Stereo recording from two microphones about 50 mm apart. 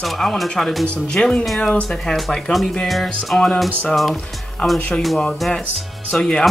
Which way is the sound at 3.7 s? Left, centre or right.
Left.